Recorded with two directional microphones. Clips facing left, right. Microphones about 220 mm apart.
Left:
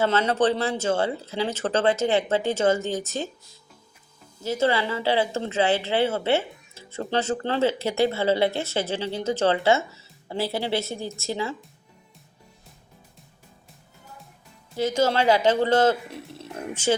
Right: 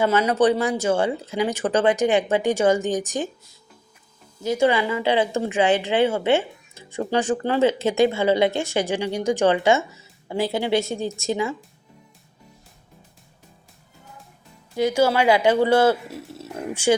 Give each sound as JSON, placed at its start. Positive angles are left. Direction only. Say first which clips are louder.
{"t": 0.0, "sound": "speech", "louder": "right 3 dB", "side_deg": -15}
{"t": 4.4, "sound": "speech", "louder": "right 4 dB", "side_deg": -15}
{"t": 14.8, "sound": "speech", "louder": "right 3 dB", "side_deg": -10}